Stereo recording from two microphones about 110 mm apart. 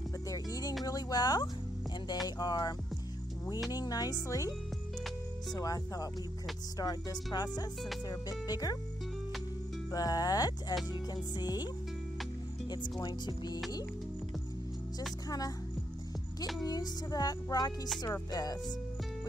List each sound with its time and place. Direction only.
0.3 s music: 35° left (ahead or behind)
0.8 s speech: 35° left (ahead or behind)
3.7 s speech: 35° left (ahead or behind)
9.8 s speech: 35° left (ahead or behind)
15.2 s speech: 35° left (ahead or behind)
16.6 s music: 35° left (ahead or behind)
18.0 s speech: 35° left (ahead or behind)